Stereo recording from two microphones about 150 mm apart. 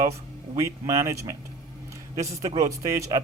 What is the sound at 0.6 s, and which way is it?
Speech, 20° right (ahead or behind).